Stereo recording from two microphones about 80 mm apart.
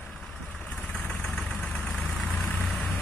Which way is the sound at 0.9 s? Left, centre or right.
Centre.